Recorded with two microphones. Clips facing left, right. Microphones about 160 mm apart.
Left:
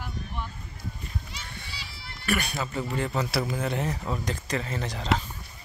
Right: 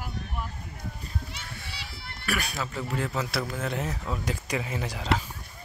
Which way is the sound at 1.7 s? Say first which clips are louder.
Right 1 dB; 60° right (ahead or behind).